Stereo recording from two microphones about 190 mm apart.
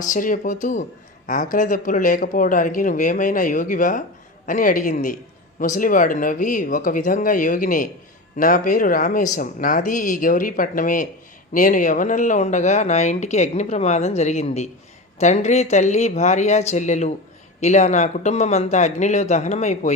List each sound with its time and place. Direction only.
0.0 s speech: 45° left (ahead or behind)